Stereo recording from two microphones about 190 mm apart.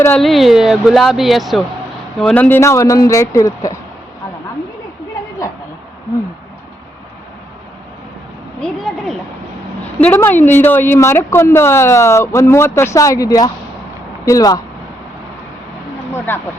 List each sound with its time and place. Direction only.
0.0 s speech: 5° left (ahead or behind)
8.6 s speech: centre (ahead or behind); by 14.6 s 20° left (ahead or behind)
16.1 s speech: 10° left (ahead or behind)